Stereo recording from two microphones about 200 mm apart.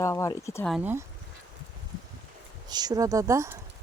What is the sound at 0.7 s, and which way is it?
Speech, 10° right (ahead or behind).